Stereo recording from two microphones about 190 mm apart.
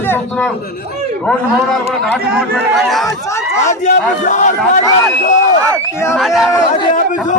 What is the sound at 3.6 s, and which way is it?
Speech, 40° left (ahead or behind).